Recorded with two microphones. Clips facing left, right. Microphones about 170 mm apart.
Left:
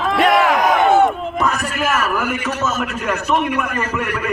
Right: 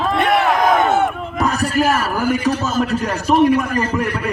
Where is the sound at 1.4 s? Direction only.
35° right (ahead or behind).